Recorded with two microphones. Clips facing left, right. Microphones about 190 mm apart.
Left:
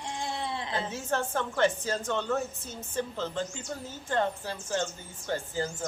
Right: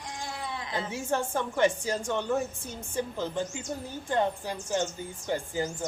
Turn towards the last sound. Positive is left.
turn(degrees=-15)  # may be behind; listen again after turning